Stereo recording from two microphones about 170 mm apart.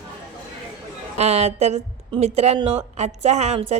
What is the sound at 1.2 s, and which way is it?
A woman's voice, 40° right (ahead or behind).